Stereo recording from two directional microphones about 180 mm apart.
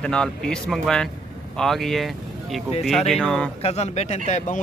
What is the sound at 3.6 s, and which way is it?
Speech, 35° left (ahead or behind).